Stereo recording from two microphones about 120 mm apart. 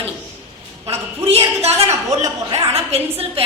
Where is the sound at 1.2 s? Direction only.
55° right (ahead or behind).